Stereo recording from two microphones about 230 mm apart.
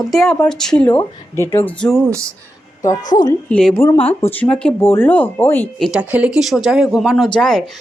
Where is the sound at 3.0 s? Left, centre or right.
Left.